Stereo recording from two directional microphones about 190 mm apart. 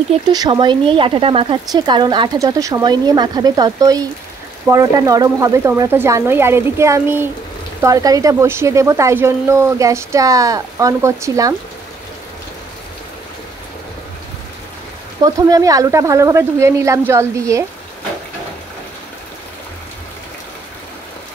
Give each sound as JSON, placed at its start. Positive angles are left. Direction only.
{"t": 0.3, "sound": "speech", "side_deg": -25}
{"t": 15.2, "sound": "speech", "side_deg": -20}